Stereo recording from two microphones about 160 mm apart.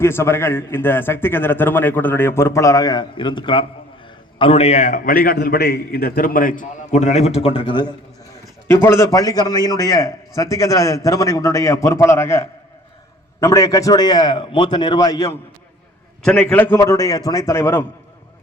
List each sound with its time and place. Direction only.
0.0 s a man's voice: 15° left (ahead or behind)
8.6 s a man's voice: 15° left (ahead or behind)
16.2 s a man's voice: 5° left (ahead or behind)